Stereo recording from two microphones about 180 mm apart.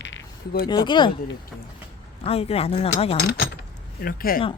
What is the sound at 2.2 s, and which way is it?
Speech, 35° left (ahead or behind).